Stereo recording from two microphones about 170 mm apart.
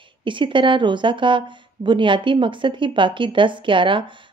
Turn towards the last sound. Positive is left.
turn(degrees=-30)  # may be behind; listen again after turning